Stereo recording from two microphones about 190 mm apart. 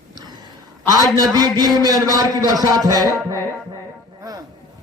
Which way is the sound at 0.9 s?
20° right (ahead or behind).